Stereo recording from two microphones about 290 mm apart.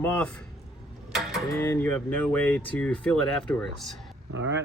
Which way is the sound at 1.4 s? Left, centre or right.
Centre.